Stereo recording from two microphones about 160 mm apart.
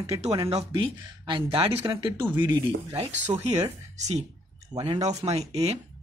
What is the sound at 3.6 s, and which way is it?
Speech, 45° right (ahead or behind).